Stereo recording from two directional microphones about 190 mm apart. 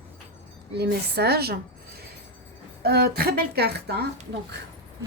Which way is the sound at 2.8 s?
55° right (ahead or behind).